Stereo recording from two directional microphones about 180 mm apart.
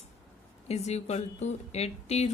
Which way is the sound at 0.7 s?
35° left (ahead or behind).